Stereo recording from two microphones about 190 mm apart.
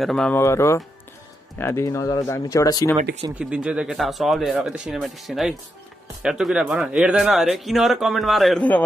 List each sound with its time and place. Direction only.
0.0 s speech: 5° left (ahead or behind)
0.4 s speech: 15° left (ahead or behind)
3.3 s speech: 5° right (ahead or behind)